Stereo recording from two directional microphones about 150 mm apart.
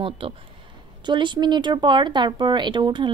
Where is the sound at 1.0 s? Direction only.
30° right (ahead or behind).